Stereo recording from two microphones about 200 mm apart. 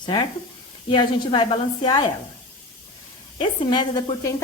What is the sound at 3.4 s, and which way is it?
Speech, 20° left (ahead or behind).